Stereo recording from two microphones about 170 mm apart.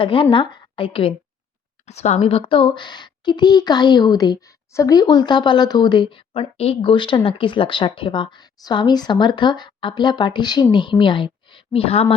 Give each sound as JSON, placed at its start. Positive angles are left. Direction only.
{"t": 0.0, "sound": "a woman's voice", "side_deg": 30}